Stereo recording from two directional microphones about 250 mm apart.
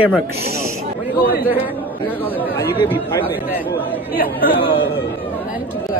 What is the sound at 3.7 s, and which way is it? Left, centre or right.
Speech, left.